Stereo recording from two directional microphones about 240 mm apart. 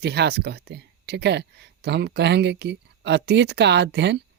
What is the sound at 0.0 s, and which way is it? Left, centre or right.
Speech, right.